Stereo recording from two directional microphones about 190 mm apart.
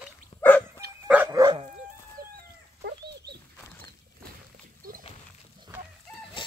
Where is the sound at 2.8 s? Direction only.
60° right (ahead or behind).